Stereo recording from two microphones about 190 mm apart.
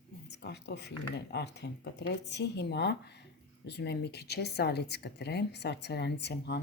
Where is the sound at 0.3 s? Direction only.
65° left (ahead or behind).